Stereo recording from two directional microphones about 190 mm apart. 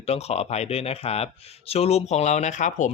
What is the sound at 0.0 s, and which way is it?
Speech, 30° left (ahead or behind).